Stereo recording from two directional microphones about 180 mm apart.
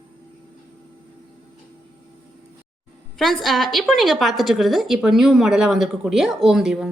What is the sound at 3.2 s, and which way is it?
A woman's voice, centre (ahead or behind).